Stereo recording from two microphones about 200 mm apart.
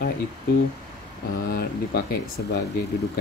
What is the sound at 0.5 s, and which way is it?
Speech, 55° left (ahead or behind).